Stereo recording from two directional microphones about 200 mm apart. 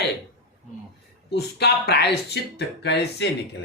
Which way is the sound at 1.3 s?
55° left (ahead or behind).